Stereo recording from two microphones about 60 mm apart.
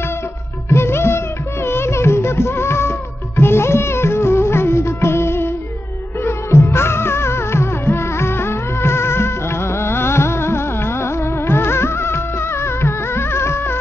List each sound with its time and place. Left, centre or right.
0.7 s music: left